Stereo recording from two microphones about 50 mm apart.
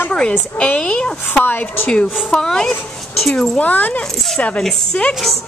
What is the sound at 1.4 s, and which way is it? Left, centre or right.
Speech, left.